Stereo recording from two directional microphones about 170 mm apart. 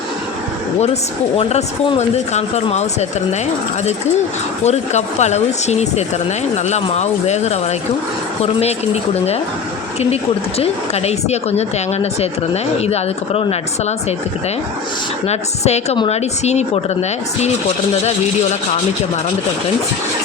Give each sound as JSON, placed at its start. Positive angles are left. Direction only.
{"t": 1.4, "sound": "speech", "side_deg": 35}
{"t": 4.6, "sound": "speech", "side_deg": 40}
{"t": 10.6, "sound": "speech", "side_deg": 40}
{"t": 15.3, "sound": "speech", "side_deg": 40}